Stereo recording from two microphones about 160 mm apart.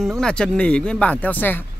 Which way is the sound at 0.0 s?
5° left (ahead or behind).